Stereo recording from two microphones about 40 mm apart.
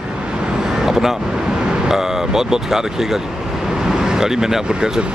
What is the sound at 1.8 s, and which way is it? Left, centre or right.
Speech, centre.